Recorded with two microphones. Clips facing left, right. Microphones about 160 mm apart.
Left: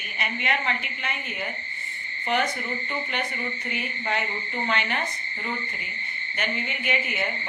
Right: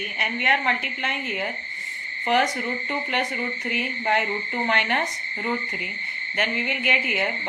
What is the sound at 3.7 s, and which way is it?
A woman's voice, 65° right (ahead or behind).